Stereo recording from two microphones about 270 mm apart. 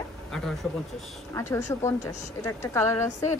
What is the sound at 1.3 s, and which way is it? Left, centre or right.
A woman's voice, centre.